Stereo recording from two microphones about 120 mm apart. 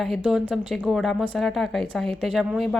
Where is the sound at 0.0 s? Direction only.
Centre (ahead or behind).